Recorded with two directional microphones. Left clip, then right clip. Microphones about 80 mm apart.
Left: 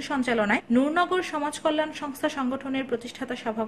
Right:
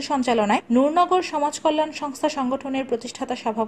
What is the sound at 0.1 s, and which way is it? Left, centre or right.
Speech, right.